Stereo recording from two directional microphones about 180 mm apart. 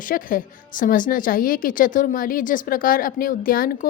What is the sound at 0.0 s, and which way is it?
A woman's voice, 50° left (ahead or behind).